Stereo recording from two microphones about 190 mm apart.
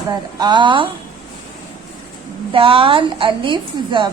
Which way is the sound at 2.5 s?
30° right (ahead or behind).